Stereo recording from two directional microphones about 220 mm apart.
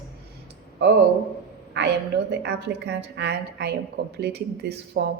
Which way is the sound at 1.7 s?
50° right (ahead or behind).